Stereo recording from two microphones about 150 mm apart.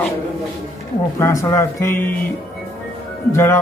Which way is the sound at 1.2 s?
20° left (ahead or behind).